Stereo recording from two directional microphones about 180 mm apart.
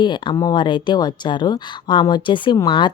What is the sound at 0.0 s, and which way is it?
Speech, 25° left (ahead or behind).